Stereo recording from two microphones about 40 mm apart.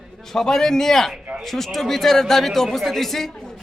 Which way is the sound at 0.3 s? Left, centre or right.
Centre.